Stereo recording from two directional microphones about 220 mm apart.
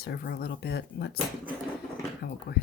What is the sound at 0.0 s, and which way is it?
Speech, 45° left (ahead or behind).